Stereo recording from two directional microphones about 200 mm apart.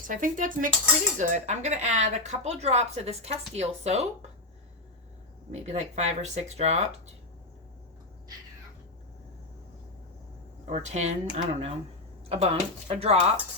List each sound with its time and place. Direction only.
0.1 s speech: 40° right (ahead or behind)
5.6 s speech: 35° right (ahead or behind)
10.7 s speech: 35° right (ahead or behind)